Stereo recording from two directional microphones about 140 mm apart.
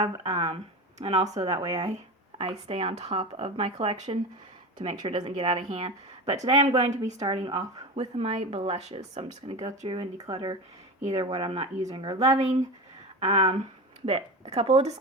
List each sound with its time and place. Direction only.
0.4 s a sound: 45° right (ahead or behind)
1.3 s speech: 50° right (ahead or behind)
9.6 s speech: 30° right (ahead or behind)
11.0 s speech: 45° right (ahead or behind)
13.1 s speech: 30° right (ahead or behind)
14.0 s speech: 45° right (ahead or behind)